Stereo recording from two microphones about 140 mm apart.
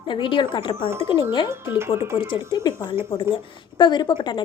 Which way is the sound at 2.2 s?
35° left (ahead or behind).